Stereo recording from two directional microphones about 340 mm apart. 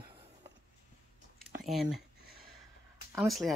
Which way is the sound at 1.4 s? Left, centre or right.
Centre.